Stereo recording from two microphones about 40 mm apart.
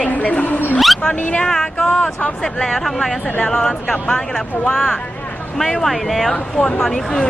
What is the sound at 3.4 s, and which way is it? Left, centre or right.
Speech, centre.